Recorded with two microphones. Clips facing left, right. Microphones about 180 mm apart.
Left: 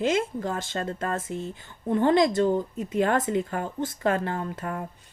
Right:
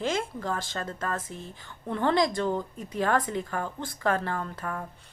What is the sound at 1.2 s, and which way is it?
Speech, 50° left (ahead or behind).